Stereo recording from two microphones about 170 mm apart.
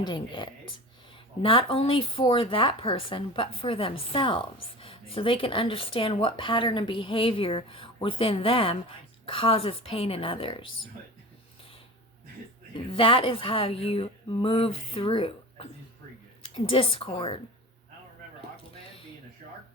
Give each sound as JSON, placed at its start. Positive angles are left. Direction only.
{"t": 0.0, "sound": "a woman's voice", "side_deg": 25}
{"t": 12.7, "sound": "speech", "side_deg": 30}